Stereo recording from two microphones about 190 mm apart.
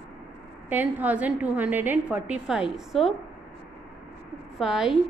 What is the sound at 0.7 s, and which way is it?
A woman's voice, 10° right (ahead or behind).